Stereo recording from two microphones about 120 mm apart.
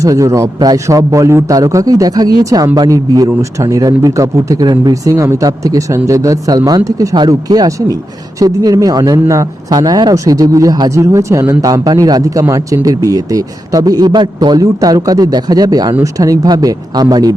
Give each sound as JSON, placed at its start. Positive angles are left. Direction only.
{"t": 0.0, "sound": "a man's voice", "side_deg": -25}